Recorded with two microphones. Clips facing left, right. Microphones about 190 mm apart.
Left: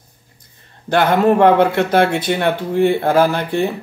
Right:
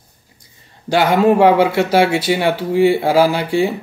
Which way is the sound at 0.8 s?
10° right (ahead or behind).